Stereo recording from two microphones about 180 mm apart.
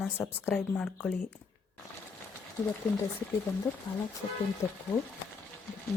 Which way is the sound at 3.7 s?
10° left (ahead or behind).